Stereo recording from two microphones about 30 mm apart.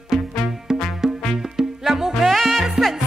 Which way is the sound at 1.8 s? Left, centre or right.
Centre.